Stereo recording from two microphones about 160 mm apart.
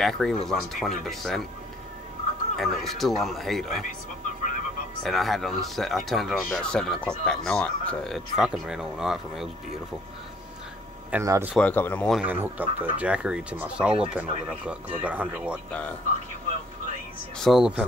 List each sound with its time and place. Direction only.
0.0 s speech: 5° left (ahead or behind)
2.5 s speech: centre (ahead or behind)
5.0 s speech: centre (ahead or behind)
11.2 s speech: 20° right (ahead or behind)
11.5 s speech: 10° left (ahead or behind)
12.2 s speech: 10° right (ahead or behind)
17.4 s speech: centre (ahead or behind)